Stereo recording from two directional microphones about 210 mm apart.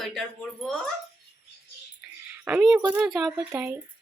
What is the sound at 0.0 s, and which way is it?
Speech, centre (ahead or behind).